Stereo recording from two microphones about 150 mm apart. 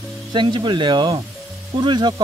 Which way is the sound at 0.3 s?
30° right (ahead or behind).